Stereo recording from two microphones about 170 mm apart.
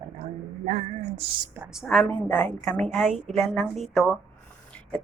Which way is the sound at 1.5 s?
5° right (ahead or behind).